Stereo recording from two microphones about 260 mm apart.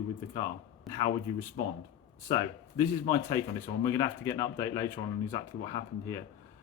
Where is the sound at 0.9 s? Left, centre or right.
Centre.